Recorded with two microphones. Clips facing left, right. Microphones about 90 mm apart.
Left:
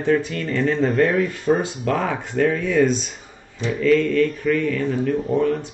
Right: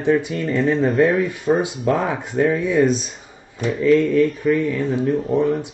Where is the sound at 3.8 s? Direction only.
20° right (ahead or behind).